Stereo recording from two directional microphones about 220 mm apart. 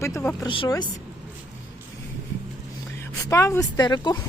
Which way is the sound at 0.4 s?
20° left (ahead or behind).